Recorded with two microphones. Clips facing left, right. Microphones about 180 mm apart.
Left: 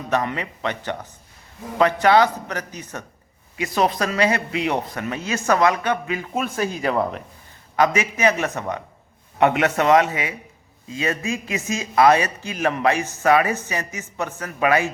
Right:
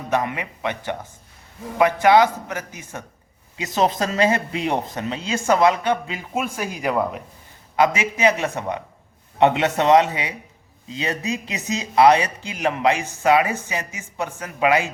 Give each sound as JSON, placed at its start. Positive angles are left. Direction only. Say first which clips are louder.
{"t": 0.1, "sound": "speech", "louder": "even", "side_deg": -15}
{"t": 3.8, "sound": "speech", "louder": "right 1 dB", "side_deg": -25}